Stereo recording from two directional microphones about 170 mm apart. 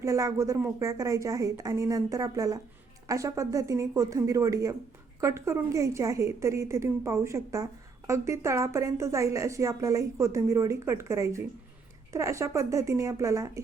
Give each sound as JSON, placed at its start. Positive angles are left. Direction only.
{"t": 0.0, "sound": "a woman's voice", "side_deg": -20}